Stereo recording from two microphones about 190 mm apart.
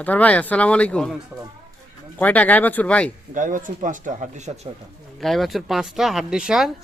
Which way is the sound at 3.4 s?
40° right (ahead or behind).